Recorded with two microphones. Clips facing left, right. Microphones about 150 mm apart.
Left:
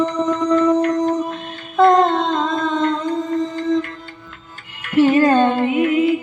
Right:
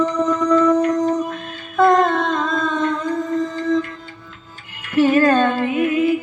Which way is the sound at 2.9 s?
20° left (ahead or behind).